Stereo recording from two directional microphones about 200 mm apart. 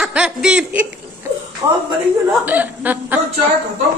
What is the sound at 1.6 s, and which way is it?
Speech, 15° right (ahead or behind).